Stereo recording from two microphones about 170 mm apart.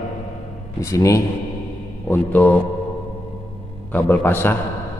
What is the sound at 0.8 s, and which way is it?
A man's voice, 20° left (ahead or behind).